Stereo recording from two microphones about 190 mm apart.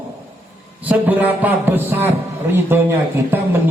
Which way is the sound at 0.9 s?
10° right (ahead or behind).